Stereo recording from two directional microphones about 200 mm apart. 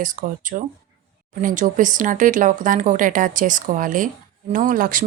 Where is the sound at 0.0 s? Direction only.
40° right (ahead or behind).